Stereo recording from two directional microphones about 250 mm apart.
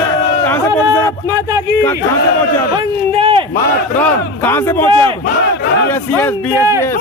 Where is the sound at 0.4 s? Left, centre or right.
Centre.